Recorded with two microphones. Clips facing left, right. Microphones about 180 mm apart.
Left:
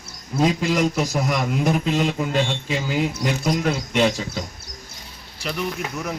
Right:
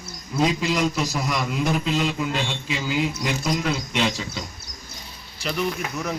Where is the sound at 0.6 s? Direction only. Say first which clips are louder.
Left 2 dB; 50° left (ahead or behind).